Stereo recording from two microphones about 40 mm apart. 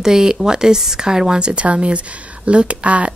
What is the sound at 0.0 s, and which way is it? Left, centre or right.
A woman's voice, centre.